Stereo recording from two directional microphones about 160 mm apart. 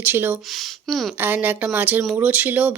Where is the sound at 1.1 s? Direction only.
10° right (ahead or behind).